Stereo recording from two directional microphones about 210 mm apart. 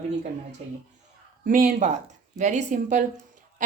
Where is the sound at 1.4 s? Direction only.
40° right (ahead or behind).